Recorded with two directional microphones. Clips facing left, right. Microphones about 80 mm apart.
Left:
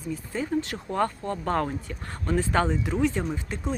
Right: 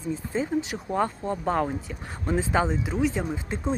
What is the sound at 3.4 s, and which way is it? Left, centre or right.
Speech, right.